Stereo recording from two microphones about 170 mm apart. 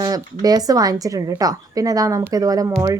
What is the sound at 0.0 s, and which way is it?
Speech, 20° right (ahead or behind).